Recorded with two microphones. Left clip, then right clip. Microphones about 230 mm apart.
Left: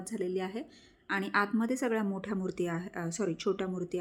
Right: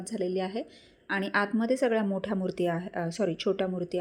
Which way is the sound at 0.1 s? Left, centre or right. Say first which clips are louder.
Right 4 dB; centre.